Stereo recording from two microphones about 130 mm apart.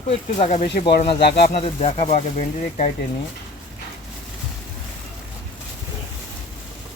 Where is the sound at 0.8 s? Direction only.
45° left (ahead or behind); by 2.9 s 70° left (ahead or behind).